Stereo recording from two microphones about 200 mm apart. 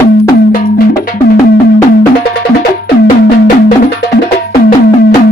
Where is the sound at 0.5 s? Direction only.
45° left (ahead or behind).